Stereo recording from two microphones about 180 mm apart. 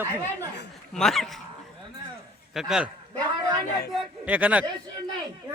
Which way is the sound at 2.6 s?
5° right (ahead or behind).